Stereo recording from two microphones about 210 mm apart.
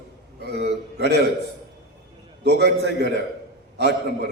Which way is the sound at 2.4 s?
50° right (ahead or behind).